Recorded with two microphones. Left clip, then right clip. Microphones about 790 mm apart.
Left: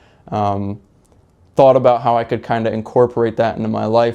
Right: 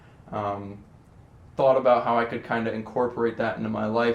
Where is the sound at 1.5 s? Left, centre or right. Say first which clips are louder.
Left 9 dB; left.